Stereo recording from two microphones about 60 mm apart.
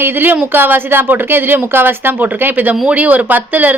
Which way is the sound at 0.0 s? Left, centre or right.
Right.